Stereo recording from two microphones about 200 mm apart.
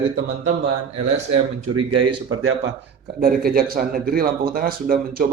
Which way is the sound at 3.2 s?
45° right (ahead or behind).